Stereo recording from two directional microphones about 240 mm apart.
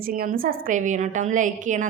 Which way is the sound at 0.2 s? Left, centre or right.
Right.